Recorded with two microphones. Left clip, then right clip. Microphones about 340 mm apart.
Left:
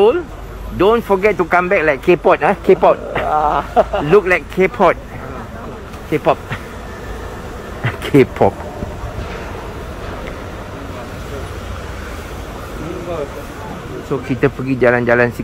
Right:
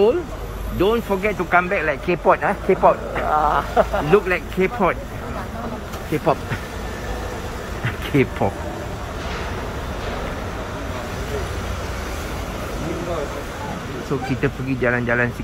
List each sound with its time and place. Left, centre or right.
0.7 s speech: centre; by 4.0 s left
4.1 s speech: centre
6.1 s speech: centre
7.8 s bee: centre
14.4 s speech: centre